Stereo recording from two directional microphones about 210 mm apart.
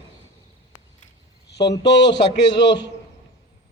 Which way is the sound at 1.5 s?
55° left (ahead or behind).